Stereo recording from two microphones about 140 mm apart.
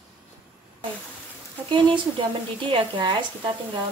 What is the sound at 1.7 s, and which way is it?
A woman's voice, 35° right (ahead or behind).